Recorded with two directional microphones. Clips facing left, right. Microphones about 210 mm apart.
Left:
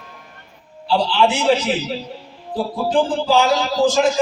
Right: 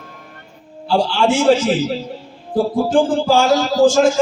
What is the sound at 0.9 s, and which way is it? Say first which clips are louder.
Speech: right 2 dB; 45° right (ahead or behind).